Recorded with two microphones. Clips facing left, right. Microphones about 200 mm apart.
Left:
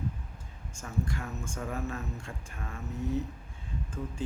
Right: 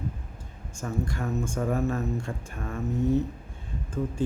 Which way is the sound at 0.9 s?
45° right (ahead or behind).